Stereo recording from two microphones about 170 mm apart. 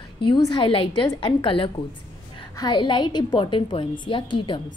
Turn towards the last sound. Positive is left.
turn(degrees=30)  # may be behind; listen again after turning